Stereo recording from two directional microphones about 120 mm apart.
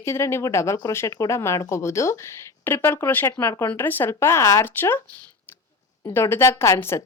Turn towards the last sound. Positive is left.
turn(degrees=25)  # may be behind; listen again after turning